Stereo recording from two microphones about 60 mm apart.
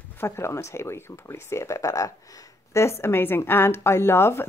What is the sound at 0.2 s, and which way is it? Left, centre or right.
A woman's voice, left.